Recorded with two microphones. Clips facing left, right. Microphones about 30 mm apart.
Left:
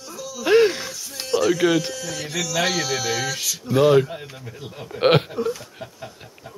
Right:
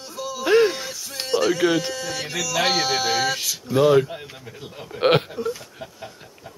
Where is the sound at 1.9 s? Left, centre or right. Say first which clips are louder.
Right 1 dB; right.